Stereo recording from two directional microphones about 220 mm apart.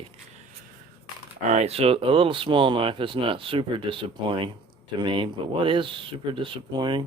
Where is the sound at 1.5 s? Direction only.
30° right (ahead or behind).